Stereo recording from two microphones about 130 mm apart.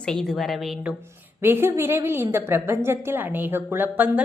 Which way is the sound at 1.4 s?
15° right (ahead or behind).